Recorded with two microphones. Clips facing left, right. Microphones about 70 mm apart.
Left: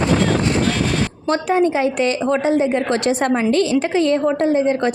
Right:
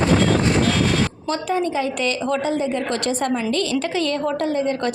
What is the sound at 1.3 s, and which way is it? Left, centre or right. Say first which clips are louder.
Speech: left 9 dB; left.